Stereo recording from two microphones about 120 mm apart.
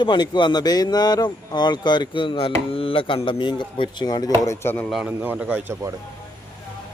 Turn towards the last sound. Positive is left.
turn(degrees=-25)  # may be behind; listen again after turning